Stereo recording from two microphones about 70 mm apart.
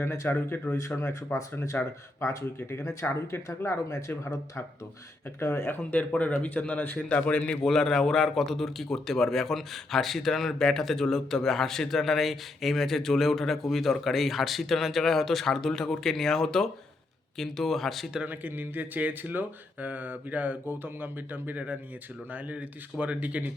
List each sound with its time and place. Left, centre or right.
0.0 s speech: left
0.8 s speech: left
5.5 s speech: left
7.6 s a man's voice: centre
18.3 s speech: right